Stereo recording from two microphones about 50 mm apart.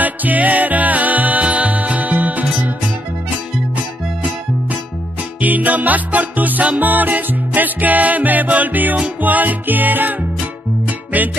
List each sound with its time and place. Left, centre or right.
0.0 s music: right
5.4 s music: right